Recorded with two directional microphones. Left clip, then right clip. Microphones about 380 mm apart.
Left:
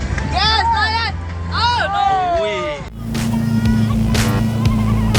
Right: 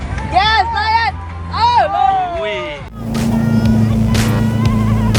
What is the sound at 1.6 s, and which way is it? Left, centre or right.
Music, centre.